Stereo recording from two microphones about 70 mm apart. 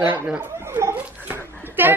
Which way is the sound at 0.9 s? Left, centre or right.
Right.